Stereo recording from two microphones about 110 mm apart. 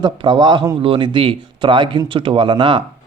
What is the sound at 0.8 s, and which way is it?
Speech, 50° right (ahead or behind).